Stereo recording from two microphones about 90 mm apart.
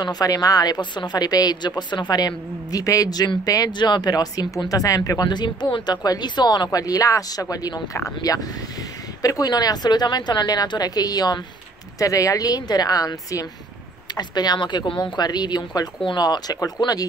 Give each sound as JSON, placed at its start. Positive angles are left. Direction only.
{"t": 0.0, "sound": "speech", "side_deg": 45}